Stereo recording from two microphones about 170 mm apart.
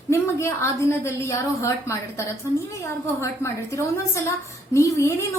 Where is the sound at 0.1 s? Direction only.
15° left (ahead or behind).